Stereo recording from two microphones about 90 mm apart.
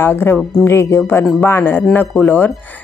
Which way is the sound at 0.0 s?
25° left (ahead or behind).